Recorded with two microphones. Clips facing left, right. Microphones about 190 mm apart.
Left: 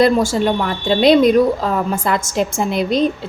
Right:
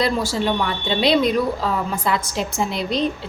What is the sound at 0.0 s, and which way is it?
A woman's voice, 50° left (ahead or behind).